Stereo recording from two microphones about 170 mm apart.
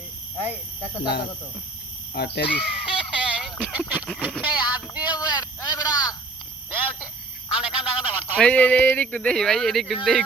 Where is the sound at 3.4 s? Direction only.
10° right (ahead or behind).